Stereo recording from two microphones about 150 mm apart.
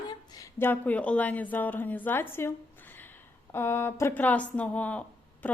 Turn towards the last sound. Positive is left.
turn(degrees=10)  # may be behind; listen again after turning